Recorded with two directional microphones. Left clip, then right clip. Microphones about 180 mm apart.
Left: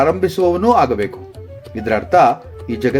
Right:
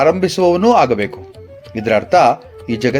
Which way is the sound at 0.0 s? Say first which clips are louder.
Right 2 dB; 40° right (ahead or behind).